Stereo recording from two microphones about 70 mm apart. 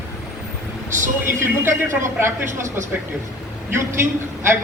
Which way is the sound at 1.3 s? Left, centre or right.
Right.